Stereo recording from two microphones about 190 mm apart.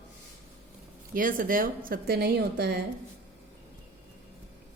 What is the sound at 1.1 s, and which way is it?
A woman's voice, 45° right (ahead or behind).